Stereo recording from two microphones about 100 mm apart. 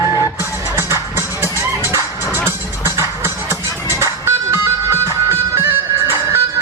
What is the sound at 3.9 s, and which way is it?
Music, 25° right (ahead or behind).